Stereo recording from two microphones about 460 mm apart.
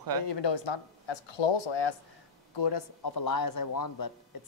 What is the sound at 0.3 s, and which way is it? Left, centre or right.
Speech, left.